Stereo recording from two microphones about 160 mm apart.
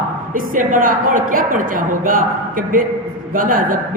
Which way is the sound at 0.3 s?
55° right (ahead or behind).